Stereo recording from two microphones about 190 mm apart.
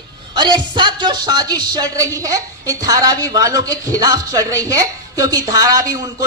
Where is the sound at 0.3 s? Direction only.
25° right (ahead or behind).